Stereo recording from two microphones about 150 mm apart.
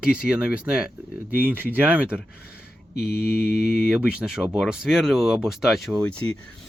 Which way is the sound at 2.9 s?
90° left.